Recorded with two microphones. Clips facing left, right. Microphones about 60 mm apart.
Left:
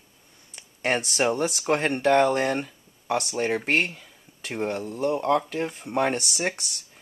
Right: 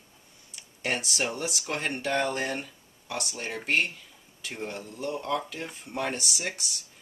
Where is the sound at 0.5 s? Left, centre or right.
Left.